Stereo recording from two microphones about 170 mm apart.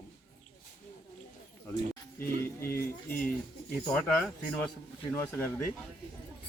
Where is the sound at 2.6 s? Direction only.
15° left (ahead or behind).